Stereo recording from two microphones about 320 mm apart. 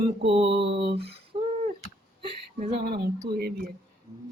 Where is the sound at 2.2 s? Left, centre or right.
Right.